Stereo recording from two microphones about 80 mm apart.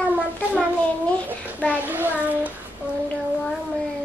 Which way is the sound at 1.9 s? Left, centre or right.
Right.